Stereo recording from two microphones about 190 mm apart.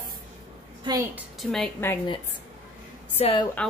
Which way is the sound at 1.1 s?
Centre (ahead or behind).